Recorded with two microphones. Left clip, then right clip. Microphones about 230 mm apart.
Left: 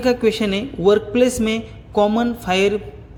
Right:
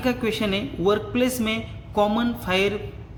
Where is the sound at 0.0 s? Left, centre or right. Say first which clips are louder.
Left 7 dB; left.